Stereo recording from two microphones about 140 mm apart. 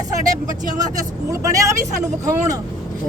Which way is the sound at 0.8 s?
25° right (ahead or behind).